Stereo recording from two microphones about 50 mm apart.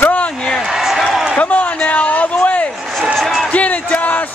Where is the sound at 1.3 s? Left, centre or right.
Left.